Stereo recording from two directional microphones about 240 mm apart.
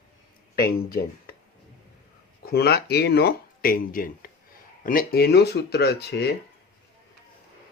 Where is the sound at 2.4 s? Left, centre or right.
Left.